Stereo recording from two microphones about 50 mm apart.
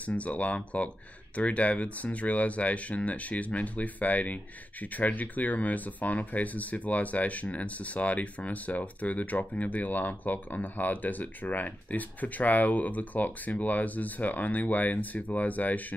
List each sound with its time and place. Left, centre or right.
0.0 s speech: left